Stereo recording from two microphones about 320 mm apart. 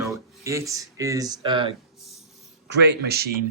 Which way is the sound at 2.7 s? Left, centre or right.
Right.